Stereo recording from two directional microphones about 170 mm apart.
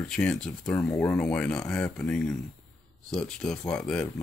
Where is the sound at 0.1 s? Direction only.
5° left (ahead or behind).